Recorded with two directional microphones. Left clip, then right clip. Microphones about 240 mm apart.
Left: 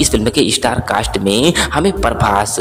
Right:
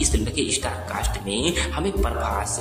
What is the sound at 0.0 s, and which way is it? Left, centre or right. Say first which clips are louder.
Speech: left 11 dB; left.